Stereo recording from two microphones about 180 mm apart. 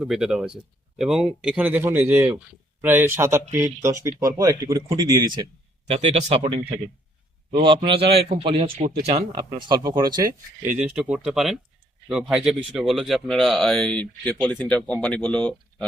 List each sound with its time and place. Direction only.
0.0 s a man's voice: 5° right (ahead or behind); by 5.5 s 25° right (ahead or behind)
5.9 s a man's voice: 35° right (ahead or behind)
8.8 s speech: 60° right (ahead or behind)
9.0 s a man's voice: 25° right (ahead or behind); by 15.5 s 5° left (ahead or behind)